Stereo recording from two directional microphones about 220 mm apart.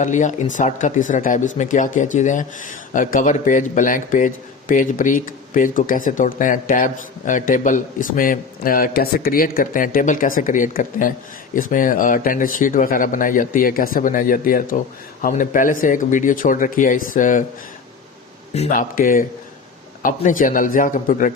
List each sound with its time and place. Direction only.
0.0 s speech: 35° left (ahead or behind)
18.5 s speech: 35° left (ahead or behind)